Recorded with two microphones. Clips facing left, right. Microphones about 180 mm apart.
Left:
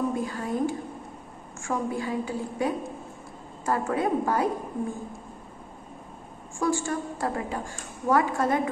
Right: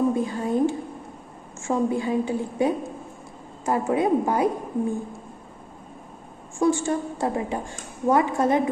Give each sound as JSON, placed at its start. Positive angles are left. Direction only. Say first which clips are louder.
{"t": 0.1, "sound": "a woman's voice", "louder": "right 5 dB", "side_deg": -20}
{"t": 6.6, "sound": "a woman's voice", "louder": "right 5 dB", "side_deg": -20}